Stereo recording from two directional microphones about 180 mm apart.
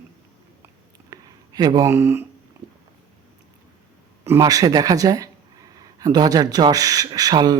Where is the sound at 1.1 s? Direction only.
20° right (ahead or behind).